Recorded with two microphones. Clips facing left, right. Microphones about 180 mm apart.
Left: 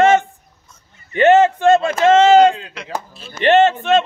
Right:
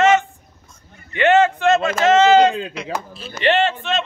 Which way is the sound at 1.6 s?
30° left (ahead or behind).